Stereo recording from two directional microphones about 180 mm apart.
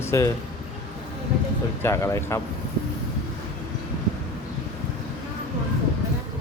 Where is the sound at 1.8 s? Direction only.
15° left (ahead or behind).